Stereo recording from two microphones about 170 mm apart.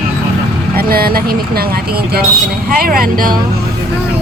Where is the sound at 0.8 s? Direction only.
60° right (ahead or behind).